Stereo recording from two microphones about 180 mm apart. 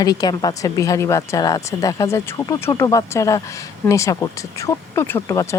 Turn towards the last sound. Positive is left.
turn(degrees=15)  # may be behind; listen again after turning